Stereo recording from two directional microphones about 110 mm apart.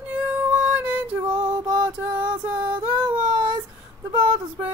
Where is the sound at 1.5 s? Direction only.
40° right (ahead or behind).